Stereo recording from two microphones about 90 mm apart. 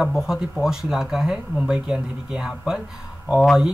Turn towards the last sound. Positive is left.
turn(degrees=-5)  # may be behind; listen again after turning